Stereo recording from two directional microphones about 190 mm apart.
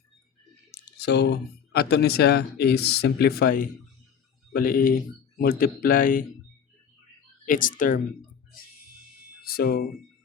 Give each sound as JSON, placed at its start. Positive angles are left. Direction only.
{"t": 0.7, "sound": "speech", "side_deg": 60}
{"t": 7.4, "sound": "speech", "side_deg": 45}
{"t": 9.4, "sound": "speech", "side_deg": 50}